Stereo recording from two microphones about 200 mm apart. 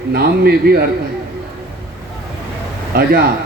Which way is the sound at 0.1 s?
50° right (ahead or behind).